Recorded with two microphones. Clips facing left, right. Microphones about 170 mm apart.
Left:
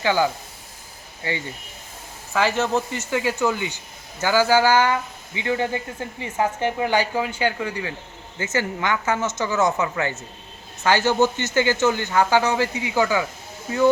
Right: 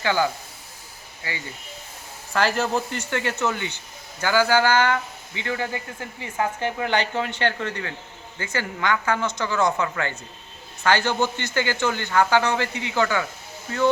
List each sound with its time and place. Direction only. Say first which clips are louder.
0.0 s speech: left 2 dB; 15° left (ahead or behind)
2.3 s speech: left 1 dB; centre (ahead or behind)